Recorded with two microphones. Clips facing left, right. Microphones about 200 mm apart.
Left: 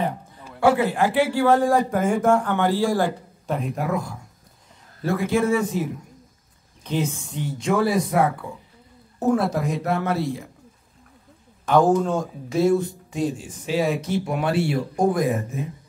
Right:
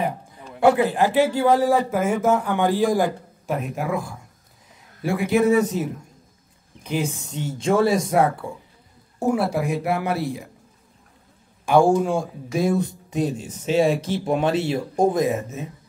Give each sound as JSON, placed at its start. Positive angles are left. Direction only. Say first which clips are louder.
{"t": 0.0, "sound": "a sound", "louder": "even", "side_deg": -15}
{"t": 0.7, "sound": "speech", "louder": "right 2 dB", "side_deg": -20}
{"t": 1.6, "sound": "speech", "louder": "even", "side_deg": -5}
{"t": 3.1, "sound": "speech", "louder": "even", "side_deg": -5}
{"t": 6.8, "sound": "speech", "louder": "even", "side_deg": -10}
{"t": 9.2, "sound": "speech", "louder": "even", "side_deg": -10}
{"t": 11.6, "sound": "speech", "louder": "right 1 dB", "side_deg": -10}